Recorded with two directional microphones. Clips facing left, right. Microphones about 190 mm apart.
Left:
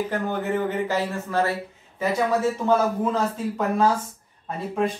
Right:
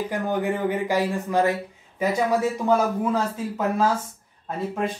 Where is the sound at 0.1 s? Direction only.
15° right (ahead or behind).